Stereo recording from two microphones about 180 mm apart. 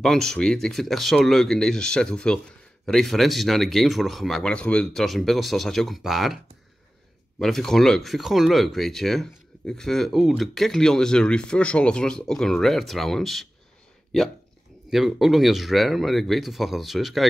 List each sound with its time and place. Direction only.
0.0 s speech: centre (ahead or behind)
14.9 s speech: centre (ahead or behind)